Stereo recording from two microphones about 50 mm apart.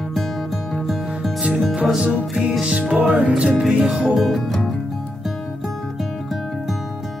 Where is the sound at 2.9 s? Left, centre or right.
Right.